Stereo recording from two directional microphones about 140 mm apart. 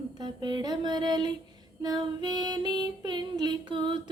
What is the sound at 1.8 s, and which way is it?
Child singing, 30° right (ahead or behind).